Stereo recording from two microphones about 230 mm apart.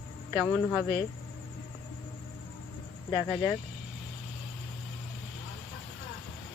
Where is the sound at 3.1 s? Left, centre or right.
Left.